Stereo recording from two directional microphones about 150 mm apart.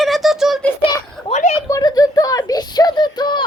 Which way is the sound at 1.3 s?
55° left (ahead or behind).